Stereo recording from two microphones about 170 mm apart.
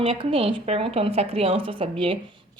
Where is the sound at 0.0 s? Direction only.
35° right (ahead or behind).